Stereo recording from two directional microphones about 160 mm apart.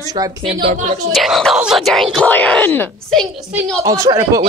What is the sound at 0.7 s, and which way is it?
Speech, 45° right (ahead or behind).